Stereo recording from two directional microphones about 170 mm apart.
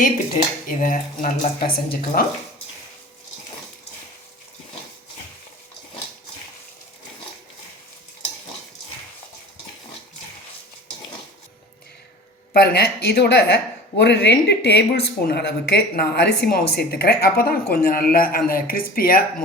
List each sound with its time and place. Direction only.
0.7 s speech: 50° left (ahead or behind)
12.5 s speech: 65° left (ahead or behind)
13.9 s speech: 90° left; by 19.2 s 60° left (ahead or behind)